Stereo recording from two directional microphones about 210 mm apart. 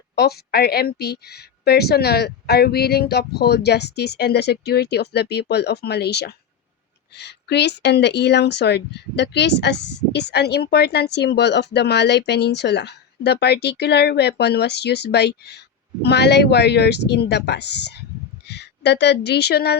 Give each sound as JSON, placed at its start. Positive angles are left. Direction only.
{"t": 0.2, "sound": "a woman's voice", "side_deg": 50}